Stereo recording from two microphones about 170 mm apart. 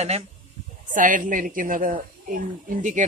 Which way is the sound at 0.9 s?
50° right (ahead or behind).